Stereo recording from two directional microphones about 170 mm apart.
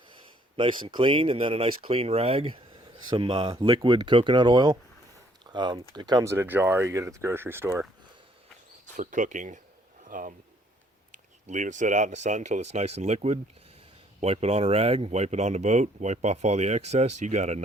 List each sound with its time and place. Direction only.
0.5 s speech: 30° right (ahead or behind); by 7.9 s 15° right (ahead or behind)
9.0 s speech: 50° right (ahead or behind)